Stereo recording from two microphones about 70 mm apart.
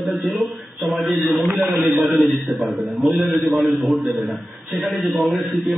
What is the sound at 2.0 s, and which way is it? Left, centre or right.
A man's voice, centre.